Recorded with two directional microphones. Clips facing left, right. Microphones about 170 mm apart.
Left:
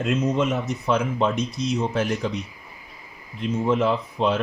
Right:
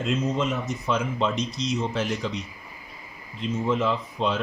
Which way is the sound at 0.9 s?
55° left (ahead or behind).